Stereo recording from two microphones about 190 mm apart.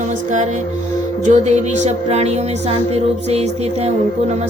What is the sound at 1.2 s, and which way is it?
Music, 35° right (ahead or behind).